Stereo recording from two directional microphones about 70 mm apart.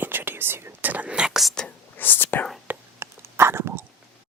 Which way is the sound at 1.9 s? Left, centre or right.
Left.